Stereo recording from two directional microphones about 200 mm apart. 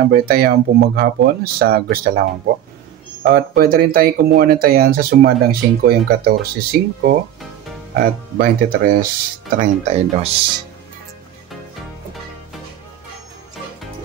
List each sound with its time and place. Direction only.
0.1 s speech: 50° right (ahead or behind)
3.3 s speech: 50° right (ahead or behind)
9.6 s speech: 35° right (ahead or behind)